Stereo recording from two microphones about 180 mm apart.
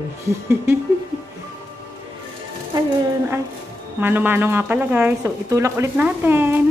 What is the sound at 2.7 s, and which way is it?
Speech, 25° right (ahead or behind).